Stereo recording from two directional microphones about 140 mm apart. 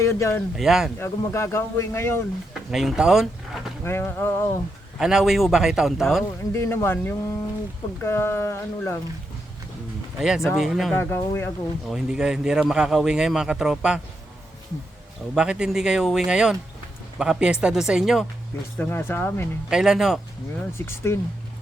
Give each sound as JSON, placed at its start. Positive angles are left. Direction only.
{"t": 0.0, "sound": "speech", "side_deg": 20}
{"t": 0.5, "sound": "speech", "side_deg": -5}
{"t": 0.9, "sound": "speech", "side_deg": 20}
{"t": 2.5, "sound": "speech", "side_deg": -5}
{"t": 3.8, "sound": "speech", "side_deg": 15}
{"t": 4.9, "sound": "speech", "side_deg": -5}
{"t": 6.5, "sound": "speech", "side_deg": 20}
{"t": 10.2, "sound": "speech", "side_deg": -5}
{"t": 10.9, "sound": "speech", "side_deg": 15}
{"t": 11.9, "sound": "speech", "side_deg": -5}
{"t": 15.4, "sound": "speech", "side_deg": -5}
{"t": 18.8, "sound": "speech", "side_deg": 15}
{"t": 19.7, "sound": "speech", "side_deg": -5}
{"t": 20.7, "sound": "speech", "side_deg": 20}